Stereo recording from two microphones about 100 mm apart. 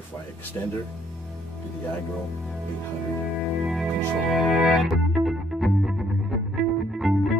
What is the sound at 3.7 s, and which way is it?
Music, centre (ahead or behind).